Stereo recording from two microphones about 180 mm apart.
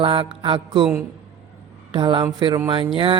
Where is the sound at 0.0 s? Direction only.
30° right (ahead or behind).